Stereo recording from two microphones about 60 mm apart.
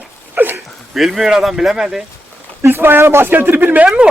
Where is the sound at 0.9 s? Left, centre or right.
Centre.